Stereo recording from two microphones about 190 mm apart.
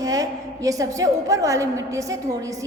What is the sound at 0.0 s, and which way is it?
A woman's voice, 20° right (ahead or behind).